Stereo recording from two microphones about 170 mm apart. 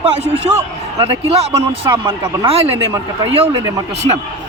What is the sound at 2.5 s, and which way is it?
Speech, 35° right (ahead or behind).